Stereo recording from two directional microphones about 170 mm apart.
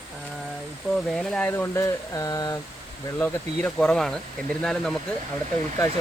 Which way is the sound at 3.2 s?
5° left (ahead or behind).